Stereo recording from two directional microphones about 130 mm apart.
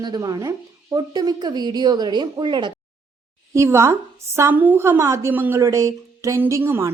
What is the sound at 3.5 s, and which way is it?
A woman's voice, 20° right (ahead or behind).